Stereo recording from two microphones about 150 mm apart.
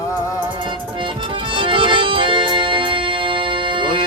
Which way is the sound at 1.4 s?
35° right (ahead or behind).